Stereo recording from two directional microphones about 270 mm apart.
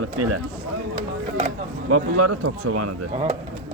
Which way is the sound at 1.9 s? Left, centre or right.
Right.